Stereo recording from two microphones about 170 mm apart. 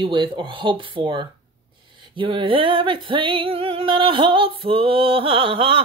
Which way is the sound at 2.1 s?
30° right (ahead or behind).